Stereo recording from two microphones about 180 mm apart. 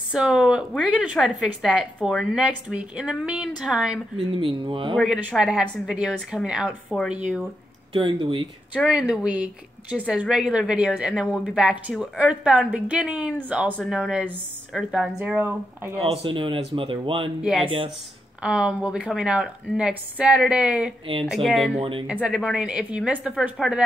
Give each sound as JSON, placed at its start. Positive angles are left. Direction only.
{"t": 0.1, "sound": "a woman's voice", "side_deg": -5}
{"t": 4.3, "sound": "speech", "side_deg": -30}
{"t": 4.9, "sound": "a woman's voice", "side_deg": 0}
{"t": 7.9, "sound": "speech", "side_deg": -30}
{"t": 8.7, "sound": "a woman's voice", "side_deg": -5}
{"t": 16.0, "sound": "speech", "side_deg": -30}
{"t": 17.4, "sound": "a woman's voice", "side_deg": -5}
{"t": 17.6, "sound": "speech", "side_deg": -30}
{"t": 18.4, "sound": "a woman's voice", "side_deg": -5}